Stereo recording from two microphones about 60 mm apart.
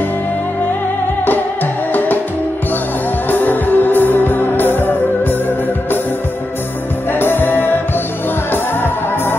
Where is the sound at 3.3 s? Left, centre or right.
Left.